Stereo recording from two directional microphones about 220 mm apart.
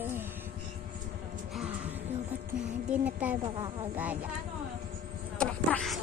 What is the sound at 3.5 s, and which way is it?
Speech, 20° right (ahead or behind).